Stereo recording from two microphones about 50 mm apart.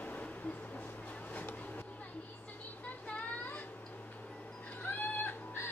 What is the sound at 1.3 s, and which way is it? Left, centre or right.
Vehicle, left.